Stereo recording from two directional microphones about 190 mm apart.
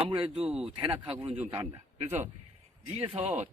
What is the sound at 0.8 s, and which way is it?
Speech, 25° right (ahead or behind).